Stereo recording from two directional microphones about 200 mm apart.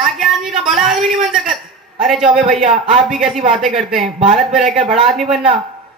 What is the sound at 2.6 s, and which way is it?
Speech, 35° right (ahead or behind).